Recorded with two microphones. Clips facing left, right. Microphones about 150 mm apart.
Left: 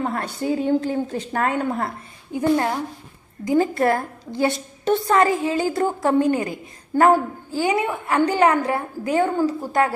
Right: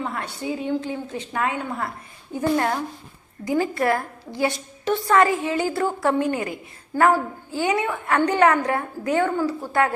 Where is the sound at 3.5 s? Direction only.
30° left (ahead or behind).